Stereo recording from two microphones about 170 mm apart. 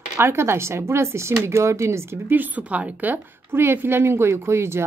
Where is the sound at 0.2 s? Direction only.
15° right (ahead or behind).